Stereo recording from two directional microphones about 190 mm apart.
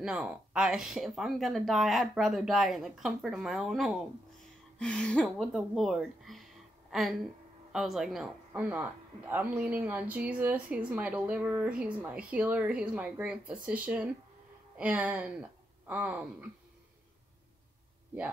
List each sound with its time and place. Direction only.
0.0 s a woman's voice: 5° right (ahead or behind)